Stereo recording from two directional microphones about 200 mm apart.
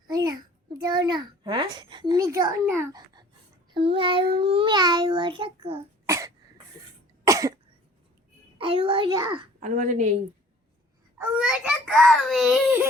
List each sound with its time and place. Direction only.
0.1 s a sound: 20° right (ahead or behind)
0.8 s a child's voice: 20° right (ahead or behind)
6.1 s cough: 15° right (ahead or behind)
8.5 s a child's voice: 25° right (ahead or behind)
9.6 s a woman's voice: 40° right (ahead or behind)
11.2 s a child's voice: 5° right (ahead or behind)